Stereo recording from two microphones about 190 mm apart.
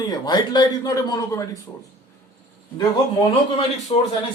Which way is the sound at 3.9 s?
30° left (ahead or behind).